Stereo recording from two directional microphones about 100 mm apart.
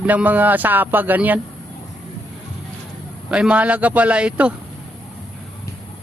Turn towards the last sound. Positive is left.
turn(degrees=-10)  # may be behind; listen again after turning